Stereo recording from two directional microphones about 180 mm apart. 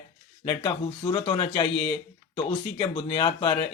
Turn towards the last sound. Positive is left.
turn(degrees=25)  # may be behind; listen again after turning